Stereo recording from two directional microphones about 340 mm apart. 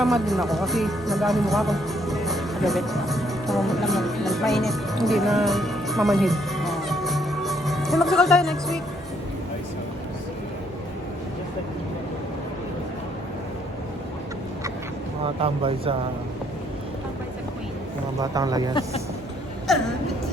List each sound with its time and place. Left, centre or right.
0.0 s speech: centre
15.4 s speech: centre
18.2 s speech: centre
18.7 s speech: centre
19.7 s a sound: centre